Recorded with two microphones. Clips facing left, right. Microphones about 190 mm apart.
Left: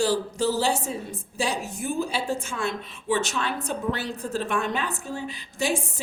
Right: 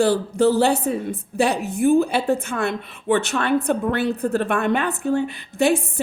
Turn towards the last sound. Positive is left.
turn(degrees=-60)  # may be behind; listen again after turning